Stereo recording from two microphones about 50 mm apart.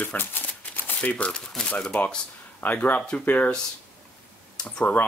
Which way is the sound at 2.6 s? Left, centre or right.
Left.